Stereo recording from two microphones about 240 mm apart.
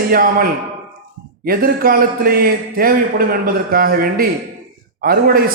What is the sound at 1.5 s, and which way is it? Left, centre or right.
A man's voice, right.